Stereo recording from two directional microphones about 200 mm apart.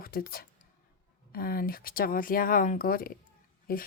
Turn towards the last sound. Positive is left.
turn(degrees=45)  # may be behind; listen again after turning